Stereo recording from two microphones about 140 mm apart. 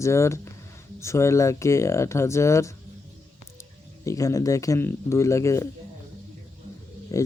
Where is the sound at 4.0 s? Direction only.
20° left (ahead or behind).